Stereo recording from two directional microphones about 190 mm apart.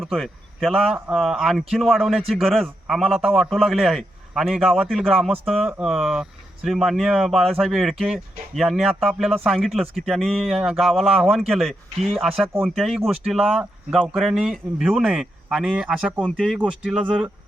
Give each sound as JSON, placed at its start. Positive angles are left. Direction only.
{"t": 0.0, "sound": "speech", "side_deg": 0}
{"t": 0.9, "sound": "a man's voice", "side_deg": -10}